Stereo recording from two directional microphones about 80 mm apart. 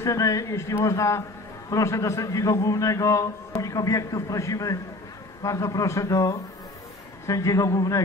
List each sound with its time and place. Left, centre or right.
0.0 s a man's voice: left